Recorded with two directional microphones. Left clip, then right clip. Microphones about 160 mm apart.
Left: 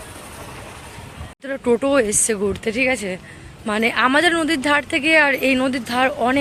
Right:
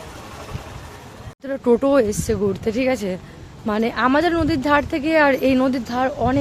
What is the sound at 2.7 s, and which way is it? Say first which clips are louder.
Speech: left 3 dB; 15° right (ahead or behind).